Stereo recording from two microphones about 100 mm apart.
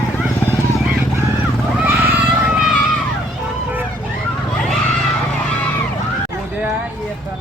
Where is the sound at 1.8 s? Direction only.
15° right (ahead or behind).